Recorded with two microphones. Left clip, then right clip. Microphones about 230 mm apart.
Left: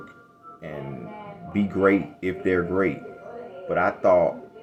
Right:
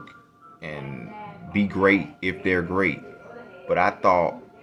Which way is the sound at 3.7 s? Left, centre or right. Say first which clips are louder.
Even; centre.